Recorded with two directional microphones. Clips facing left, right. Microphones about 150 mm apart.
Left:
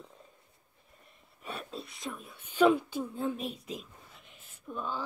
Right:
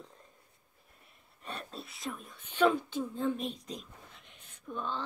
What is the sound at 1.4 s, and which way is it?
Whispering, 5° left (ahead or behind).